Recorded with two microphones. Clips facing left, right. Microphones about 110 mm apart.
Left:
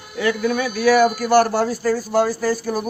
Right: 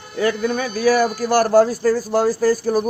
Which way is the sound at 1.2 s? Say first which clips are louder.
Right 2 dB; 45° right (ahead or behind).